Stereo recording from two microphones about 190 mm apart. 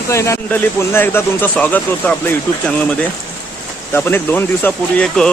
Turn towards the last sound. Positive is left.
turn(degrees=5)  # may be behind; listen again after turning